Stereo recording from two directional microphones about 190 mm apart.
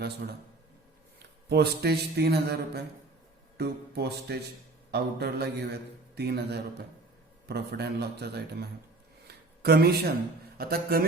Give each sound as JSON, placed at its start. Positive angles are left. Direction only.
{"t": 1.2, "sound": "a man's voice", "side_deg": -60}
{"t": 9.2, "sound": "a sound", "side_deg": -55}
{"t": 10.6, "sound": "a man's voice", "side_deg": -55}